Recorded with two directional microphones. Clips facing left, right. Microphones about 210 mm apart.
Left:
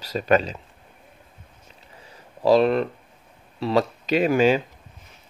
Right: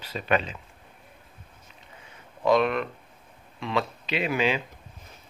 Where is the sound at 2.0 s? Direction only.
35° left (ahead or behind).